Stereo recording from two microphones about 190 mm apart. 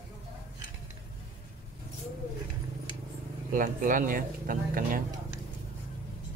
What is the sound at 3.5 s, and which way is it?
Speech, 45° right (ahead or behind).